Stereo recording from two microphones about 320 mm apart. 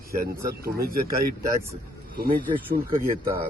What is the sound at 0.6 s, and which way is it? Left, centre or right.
Speech, right.